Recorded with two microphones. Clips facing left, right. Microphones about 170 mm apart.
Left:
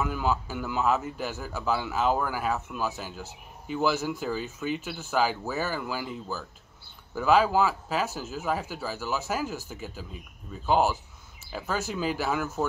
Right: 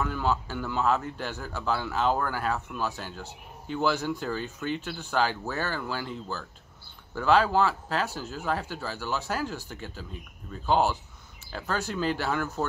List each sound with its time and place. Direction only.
0.0 s a man's voice: 5° left (ahead or behind)